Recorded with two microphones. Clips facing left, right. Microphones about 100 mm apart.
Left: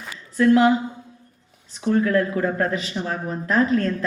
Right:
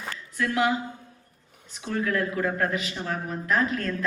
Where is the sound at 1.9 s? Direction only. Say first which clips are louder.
Left 6 dB; 35° left (ahead or behind).